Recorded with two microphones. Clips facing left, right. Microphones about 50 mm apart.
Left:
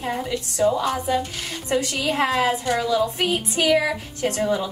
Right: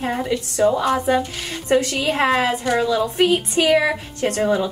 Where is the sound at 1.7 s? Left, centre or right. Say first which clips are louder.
Right 5 dB; right.